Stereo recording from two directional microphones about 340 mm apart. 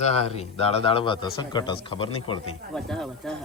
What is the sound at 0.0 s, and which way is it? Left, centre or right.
A man's voice, centre.